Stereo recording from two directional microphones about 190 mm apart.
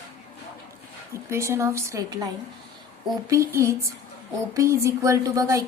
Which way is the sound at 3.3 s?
15° right (ahead or behind).